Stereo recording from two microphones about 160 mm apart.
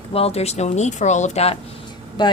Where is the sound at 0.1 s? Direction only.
40° left (ahead or behind).